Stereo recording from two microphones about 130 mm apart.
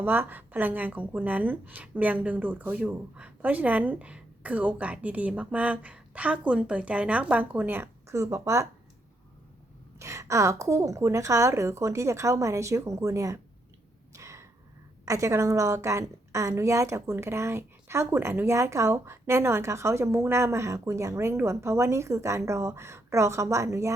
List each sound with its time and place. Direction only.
0.0 s a woman's voice: 15° right (ahead or behind)
10.0 s a woman's voice: 20° right (ahead or behind)
14.2 s a sound: 25° right (ahead or behind)
15.0 s a woman's voice: 25° right (ahead or behind)